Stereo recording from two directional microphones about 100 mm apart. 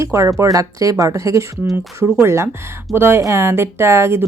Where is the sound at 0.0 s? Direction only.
30° right (ahead or behind).